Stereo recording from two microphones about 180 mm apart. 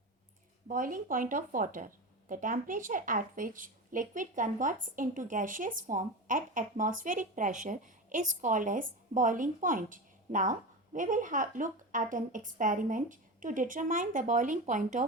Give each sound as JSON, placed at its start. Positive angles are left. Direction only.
{"t": 0.7, "sound": "a woman's voice", "side_deg": -45}